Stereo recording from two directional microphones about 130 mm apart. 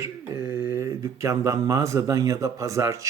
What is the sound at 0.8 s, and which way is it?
Speech, 20° right (ahead or behind).